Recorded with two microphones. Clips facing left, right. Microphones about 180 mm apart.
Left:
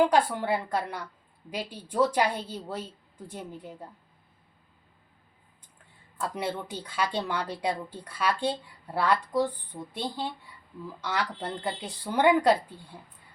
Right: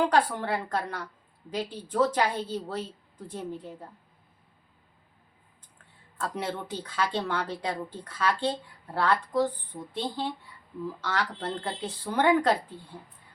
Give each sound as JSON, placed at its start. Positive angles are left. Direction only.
{"t": 0.0, "sound": "speech", "side_deg": 10}
{"t": 6.1, "sound": "speech", "side_deg": 10}
{"t": 11.0, "sound": "speech", "side_deg": 10}